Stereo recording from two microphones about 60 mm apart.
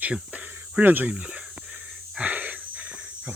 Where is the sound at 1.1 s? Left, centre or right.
Centre.